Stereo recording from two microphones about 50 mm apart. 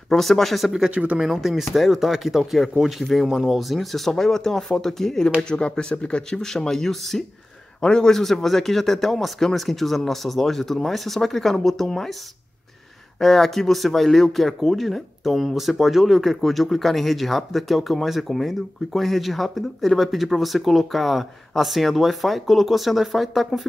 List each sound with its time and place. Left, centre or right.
0.1 s speech: centre
0.8 s speech: right
1.2 s speech: centre
5.4 s speech: centre
6.5 s speech: centre
13.2 s speech: centre